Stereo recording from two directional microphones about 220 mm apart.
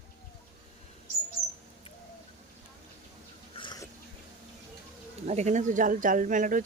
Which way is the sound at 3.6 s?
20° left (ahead or behind).